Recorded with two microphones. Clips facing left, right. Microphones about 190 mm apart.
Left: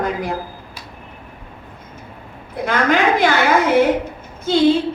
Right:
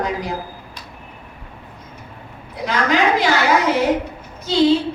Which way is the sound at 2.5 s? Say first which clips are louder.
Left 2 dB; 55° left (ahead or behind).